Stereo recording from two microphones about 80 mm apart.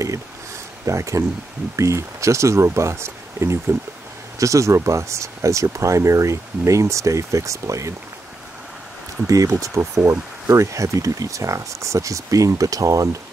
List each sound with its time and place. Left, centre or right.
0.8 s speech: right
9.3 s speech: right